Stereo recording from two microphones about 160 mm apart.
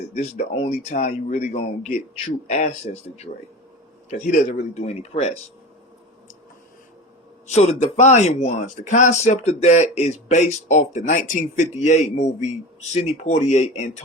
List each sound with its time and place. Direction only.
0.1 s speech: 45° left (ahead or behind)
0.9 s speech: 50° left (ahead or behind)
7.4 s speech: 45° left (ahead or behind)